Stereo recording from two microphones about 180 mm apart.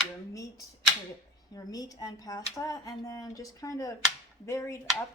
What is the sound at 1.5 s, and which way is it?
Speech, 20° left (ahead or behind).